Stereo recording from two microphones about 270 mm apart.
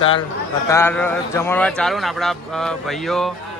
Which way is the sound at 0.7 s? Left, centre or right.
Centre.